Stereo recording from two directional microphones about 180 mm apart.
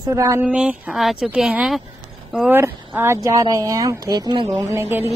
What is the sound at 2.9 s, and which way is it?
Speech, 15° right (ahead or behind).